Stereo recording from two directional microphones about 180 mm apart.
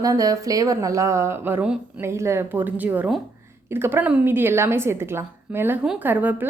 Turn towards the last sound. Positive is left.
turn(degrees=-10)  # may be behind; listen again after turning